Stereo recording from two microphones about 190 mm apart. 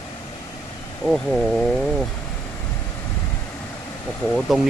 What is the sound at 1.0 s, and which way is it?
Speech, centre (ahead or behind).